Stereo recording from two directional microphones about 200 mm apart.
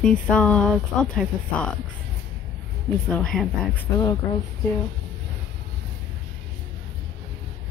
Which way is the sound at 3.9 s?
15° left (ahead or behind).